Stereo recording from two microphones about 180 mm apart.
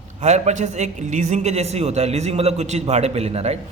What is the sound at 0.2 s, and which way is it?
A man's voice, 40° right (ahead or behind).